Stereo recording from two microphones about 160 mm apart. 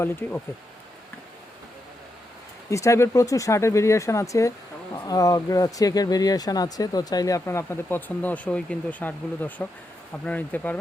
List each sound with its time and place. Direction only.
0.0 s speech: 15° left (ahead or behind)
2.6 s speech: 20° left (ahead or behind)